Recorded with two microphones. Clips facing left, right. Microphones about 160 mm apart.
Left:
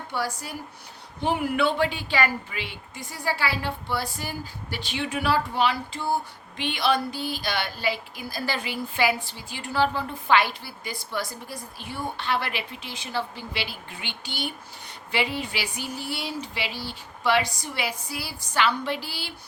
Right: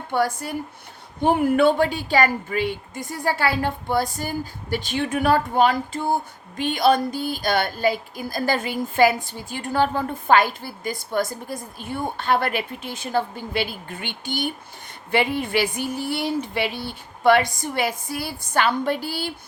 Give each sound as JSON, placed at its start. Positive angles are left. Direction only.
{"t": 0.1, "sound": "speech", "side_deg": -50}